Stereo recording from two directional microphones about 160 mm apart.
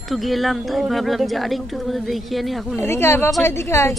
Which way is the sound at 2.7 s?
15° left (ahead or behind).